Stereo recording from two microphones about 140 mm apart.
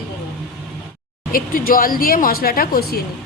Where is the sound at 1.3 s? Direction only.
90° left.